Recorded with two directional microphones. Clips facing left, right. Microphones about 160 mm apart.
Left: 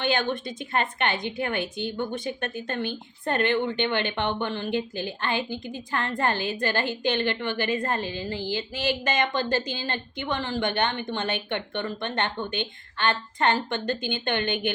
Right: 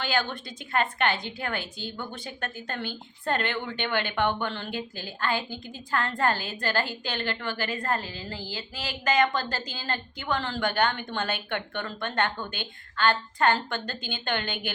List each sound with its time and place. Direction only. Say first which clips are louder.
0.0 s a woman's voice: left 4 dB; 20° left (ahead or behind)